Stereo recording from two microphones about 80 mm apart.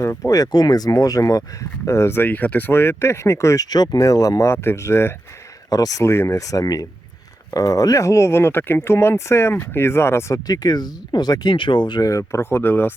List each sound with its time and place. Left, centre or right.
0.0 s speech: left
4.5 s speech: left
5.7 s speech: left
6.0 s speech: left
10.4 s speech: left
12.0 s speech: left
12.4 s speech: left